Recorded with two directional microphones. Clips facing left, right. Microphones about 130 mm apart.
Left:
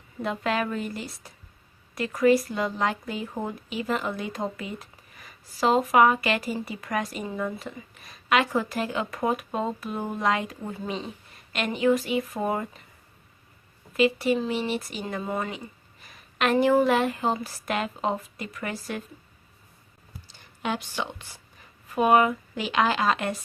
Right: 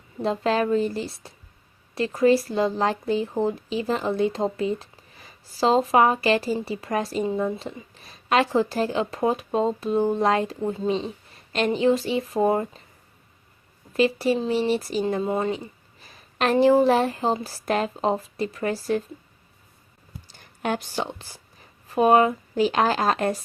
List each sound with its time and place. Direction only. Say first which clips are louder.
0.2 s speech: right 4 dB; 30° right (ahead or behind)
13.9 s speech: right 1 dB; 35° right (ahead or behind)
20.6 s speech: right 3 dB; 50° right (ahead or behind)